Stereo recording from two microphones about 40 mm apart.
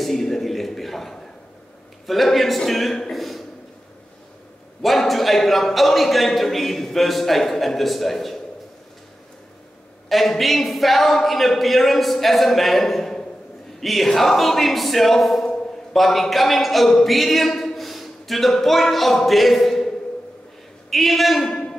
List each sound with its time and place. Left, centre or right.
0.0 s a sound: centre
2.0 s speech: centre
4.8 s speech: centre
10.0 s speech: centre
20.9 s a man's voice: centre